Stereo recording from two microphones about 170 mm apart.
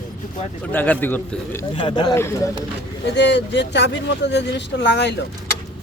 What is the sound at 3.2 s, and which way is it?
Speech, 90° left.